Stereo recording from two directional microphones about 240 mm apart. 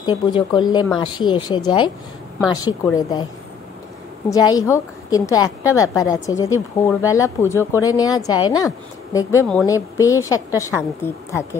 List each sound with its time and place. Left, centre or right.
0.0 s a woman's voice: centre
4.3 s a woman's voice: centre